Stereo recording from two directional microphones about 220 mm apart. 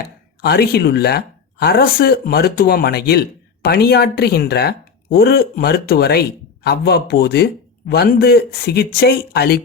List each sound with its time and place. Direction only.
0.4 s speech: 45° left (ahead or behind)